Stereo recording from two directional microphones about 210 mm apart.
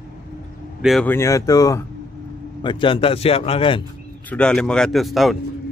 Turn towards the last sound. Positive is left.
turn(degrees=0)  # may be behind; listen again after turning